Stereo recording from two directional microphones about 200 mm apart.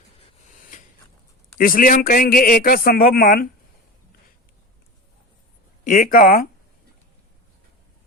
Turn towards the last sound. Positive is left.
turn(degrees=45)  # may be behind; listen again after turning